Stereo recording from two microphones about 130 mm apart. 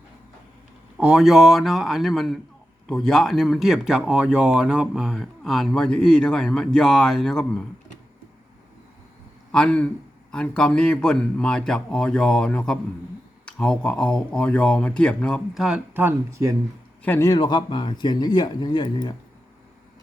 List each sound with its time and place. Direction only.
0.9 s speech: 5° right (ahead or behind)
9.5 s speech: 10° left (ahead or behind)
15.9 s speech: 15° right (ahead or behind)
17.0 s a man's voice: 15° left (ahead or behind)
17.2 s speech: 35° left (ahead or behind)